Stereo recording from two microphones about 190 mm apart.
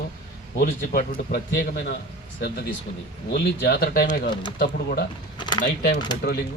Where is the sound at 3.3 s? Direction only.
55° left (ahead or behind).